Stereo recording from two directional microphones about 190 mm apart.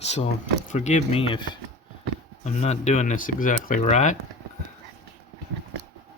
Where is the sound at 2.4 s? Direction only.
35° left (ahead or behind).